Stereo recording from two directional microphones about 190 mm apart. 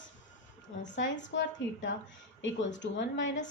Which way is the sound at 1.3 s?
75° left (ahead or behind).